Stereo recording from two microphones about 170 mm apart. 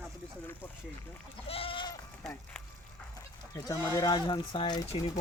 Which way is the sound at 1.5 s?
30° left (ahead or behind).